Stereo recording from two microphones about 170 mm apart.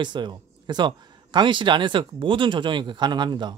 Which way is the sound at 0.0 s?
25° right (ahead or behind).